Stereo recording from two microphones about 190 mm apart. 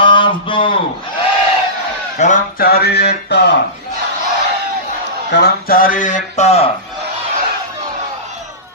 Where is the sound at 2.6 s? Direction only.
55° left (ahead or behind).